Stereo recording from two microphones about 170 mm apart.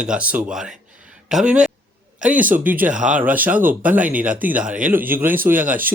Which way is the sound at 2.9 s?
45° right (ahead or behind).